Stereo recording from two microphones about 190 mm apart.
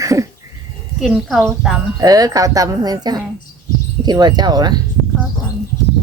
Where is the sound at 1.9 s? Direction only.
20° right (ahead or behind).